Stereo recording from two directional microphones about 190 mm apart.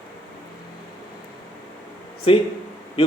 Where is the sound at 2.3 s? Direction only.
30° left (ahead or behind).